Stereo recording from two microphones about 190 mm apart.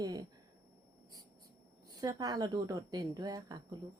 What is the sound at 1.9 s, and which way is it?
A woman's voice, 20° right (ahead or behind).